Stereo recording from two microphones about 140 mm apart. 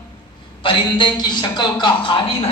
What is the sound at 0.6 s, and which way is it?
A woman's voice, 35° left (ahead or behind).